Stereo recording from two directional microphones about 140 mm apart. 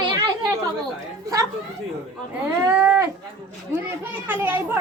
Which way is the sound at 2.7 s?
15° right (ahead or behind).